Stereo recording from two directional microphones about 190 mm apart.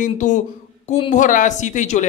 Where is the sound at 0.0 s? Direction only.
40° left (ahead or behind).